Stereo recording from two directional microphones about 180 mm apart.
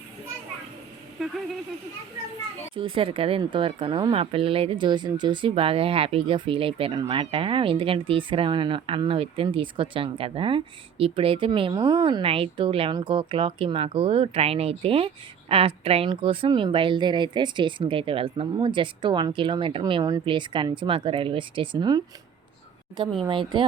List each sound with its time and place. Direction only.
1.2 s speech: centre (ahead or behind)
2.7 s speech: 30° right (ahead or behind)
23.2 s speech: 25° right (ahead or behind)